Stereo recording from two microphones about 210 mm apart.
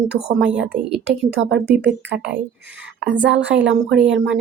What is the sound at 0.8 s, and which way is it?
Speech, 5° right (ahead or behind).